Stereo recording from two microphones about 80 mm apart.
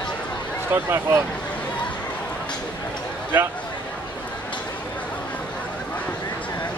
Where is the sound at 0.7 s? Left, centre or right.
Right.